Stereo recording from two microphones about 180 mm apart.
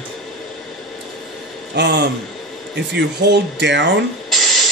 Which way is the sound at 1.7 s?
70° right (ahead or behind).